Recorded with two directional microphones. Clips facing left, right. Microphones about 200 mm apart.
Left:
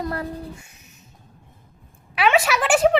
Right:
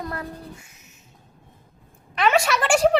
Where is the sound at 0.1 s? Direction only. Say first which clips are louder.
Left 4 dB; 35° left (ahead or behind).